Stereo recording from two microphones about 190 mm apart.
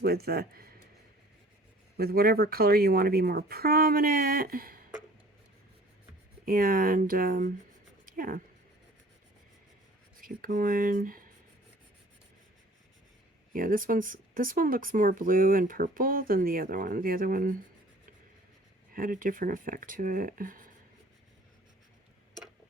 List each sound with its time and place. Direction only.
0.0 s a man's voice: 55° right (ahead or behind)
2.0 s speech: 55° right (ahead or behind)
6.4 s speech: 50° right (ahead or behind)
8.0 s a sound: 50° right (ahead or behind)
10.2 s speech: 45° right (ahead or behind)
13.5 s speech: 45° right (ahead or behind)
18.9 s speech: 45° right (ahead or behind)